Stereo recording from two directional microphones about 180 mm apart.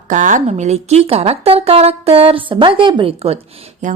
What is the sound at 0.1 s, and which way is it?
A woman's voice, 45° right (ahead or behind).